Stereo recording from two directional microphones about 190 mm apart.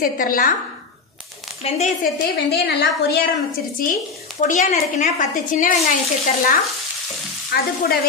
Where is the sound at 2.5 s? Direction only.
60° left (ahead or behind).